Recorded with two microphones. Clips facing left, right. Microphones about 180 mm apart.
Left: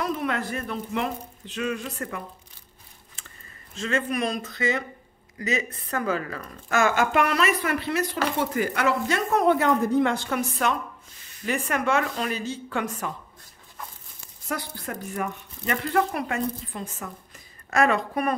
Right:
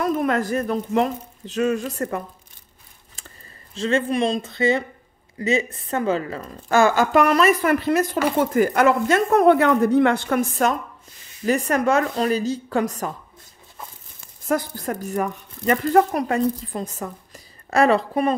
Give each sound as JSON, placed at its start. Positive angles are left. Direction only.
{"t": 0.0, "sound": "speech", "side_deg": -45}
{"t": 14.5, "sound": "speech", "side_deg": -45}